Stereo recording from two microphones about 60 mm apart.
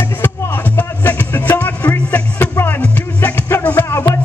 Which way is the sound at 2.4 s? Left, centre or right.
Left.